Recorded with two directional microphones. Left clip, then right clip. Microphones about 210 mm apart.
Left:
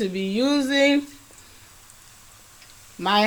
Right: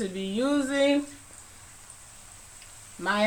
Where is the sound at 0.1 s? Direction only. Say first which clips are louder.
Left 5 dB; 30° left (ahead or behind).